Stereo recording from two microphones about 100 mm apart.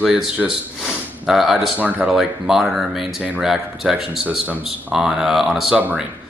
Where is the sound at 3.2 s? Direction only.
15° right (ahead or behind).